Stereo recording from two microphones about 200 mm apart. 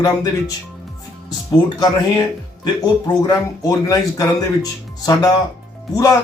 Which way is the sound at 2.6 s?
20° left (ahead or behind).